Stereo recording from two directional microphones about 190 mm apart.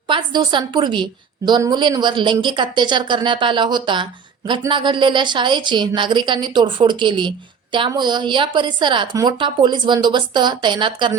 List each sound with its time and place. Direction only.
0.1 s a woman's voice: 25° right (ahead or behind)